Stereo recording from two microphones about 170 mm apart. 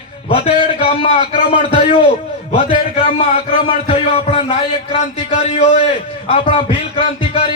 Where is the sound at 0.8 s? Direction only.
35° left (ahead or behind).